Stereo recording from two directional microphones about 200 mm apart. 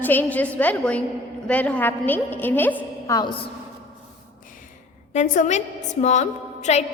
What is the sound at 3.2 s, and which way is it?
Speech, 25° left (ahead or behind).